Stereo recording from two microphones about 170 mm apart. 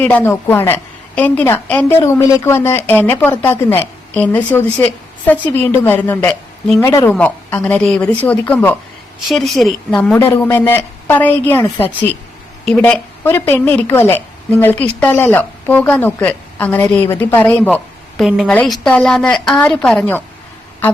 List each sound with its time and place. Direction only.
0.0 s a woman's voice: 10° left (ahead or behind)